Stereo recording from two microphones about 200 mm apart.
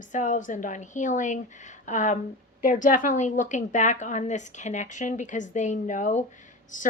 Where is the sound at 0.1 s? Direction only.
40° left (ahead or behind).